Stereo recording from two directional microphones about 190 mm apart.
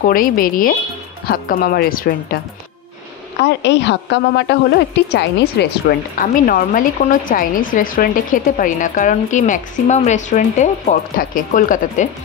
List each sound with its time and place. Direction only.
0.0 s a woman's voice: 45° left (ahead or behind)
3.3 s a woman's voice: 65° left (ahead or behind); by 12.1 s 45° left (ahead or behind)